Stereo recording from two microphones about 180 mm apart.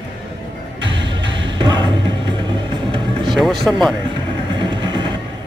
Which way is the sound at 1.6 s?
25° right (ahead or behind).